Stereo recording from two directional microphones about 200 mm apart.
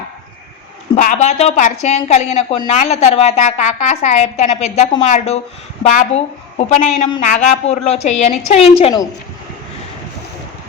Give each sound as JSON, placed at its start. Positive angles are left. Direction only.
{"t": 0.9, "sound": "a woman's voice", "side_deg": 40}